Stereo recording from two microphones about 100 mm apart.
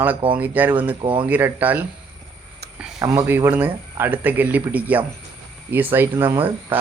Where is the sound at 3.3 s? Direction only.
20° right (ahead or behind).